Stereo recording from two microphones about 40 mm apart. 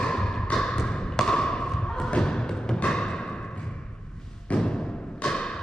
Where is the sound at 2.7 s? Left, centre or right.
Left.